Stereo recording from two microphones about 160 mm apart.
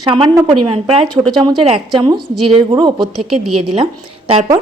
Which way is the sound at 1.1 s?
5° left (ahead or behind).